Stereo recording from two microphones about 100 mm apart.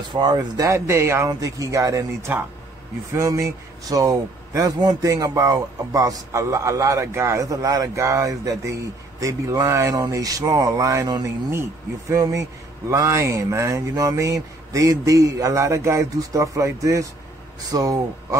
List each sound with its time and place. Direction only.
0.1 s speech: 45° right (ahead or behind)